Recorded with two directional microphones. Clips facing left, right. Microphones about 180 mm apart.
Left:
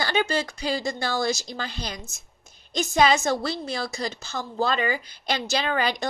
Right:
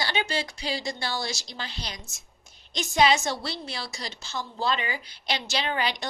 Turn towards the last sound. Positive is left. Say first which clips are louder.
# left 4 dB
turn(degrees=45)  # may be behind; listen again after turning